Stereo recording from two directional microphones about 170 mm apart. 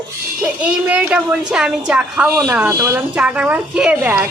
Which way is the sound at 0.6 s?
5° right (ahead or behind).